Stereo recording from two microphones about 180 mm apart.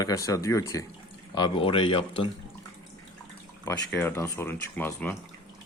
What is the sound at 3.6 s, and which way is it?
Speech, 5° left (ahead or behind).